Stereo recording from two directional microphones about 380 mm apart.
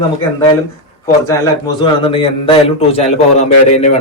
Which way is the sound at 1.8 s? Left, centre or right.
Centre.